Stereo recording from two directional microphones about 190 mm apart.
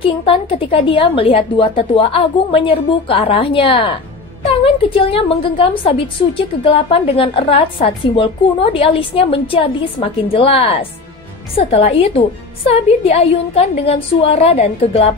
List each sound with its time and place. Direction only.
0.0 s a woman's voice: 30° left (ahead or behind)